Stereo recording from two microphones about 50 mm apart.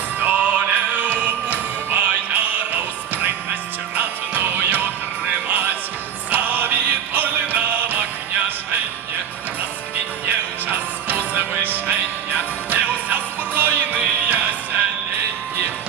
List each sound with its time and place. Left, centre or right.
0.2 s music: right
10.2 s music: right